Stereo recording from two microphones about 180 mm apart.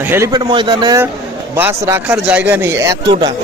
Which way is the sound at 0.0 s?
10° right (ahead or behind).